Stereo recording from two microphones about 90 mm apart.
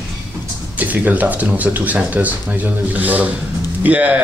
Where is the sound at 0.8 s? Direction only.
15° right (ahead or behind).